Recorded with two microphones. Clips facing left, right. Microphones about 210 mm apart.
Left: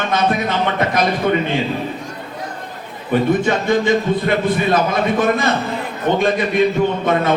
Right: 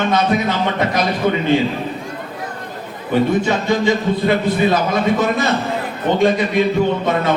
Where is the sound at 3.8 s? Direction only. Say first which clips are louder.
Even; 55° left (ahead or behind).